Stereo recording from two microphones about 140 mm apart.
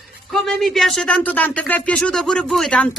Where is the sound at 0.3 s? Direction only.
Centre (ahead or behind).